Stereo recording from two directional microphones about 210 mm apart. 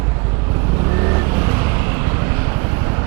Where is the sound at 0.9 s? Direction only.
20° right (ahead or behind).